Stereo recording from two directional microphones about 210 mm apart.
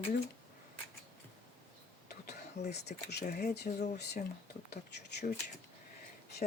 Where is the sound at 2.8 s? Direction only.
50° left (ahead or behind).